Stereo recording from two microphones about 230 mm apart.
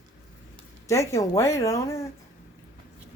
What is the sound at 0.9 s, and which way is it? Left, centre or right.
Speech, centre.